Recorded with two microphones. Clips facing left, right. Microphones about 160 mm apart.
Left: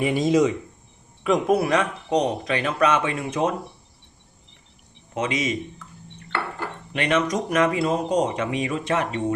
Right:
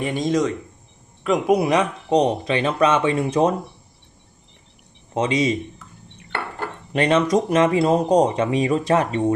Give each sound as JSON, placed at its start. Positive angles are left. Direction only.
{"t": 0.0, "sound": "speech", "side_deg": 5}
{"t": 1.5, "sound": "speech", "side_deg": -15}
{"t": 2.0, "sound": "speech", "side_deg": -30}
{"t": 5.1, "sound": "speech", "side_deg": -30}
{"t": 6.9, "sound": "speech", "side_deg": -35}